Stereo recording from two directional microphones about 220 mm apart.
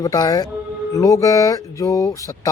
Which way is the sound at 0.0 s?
15° left (ahead or behind).